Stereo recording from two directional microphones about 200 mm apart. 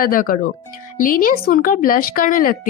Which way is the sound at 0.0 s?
45° left (ahead or behind).